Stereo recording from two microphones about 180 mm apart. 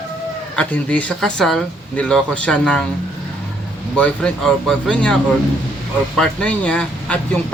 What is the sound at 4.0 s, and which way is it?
Speech, 5° left (ahead or behind).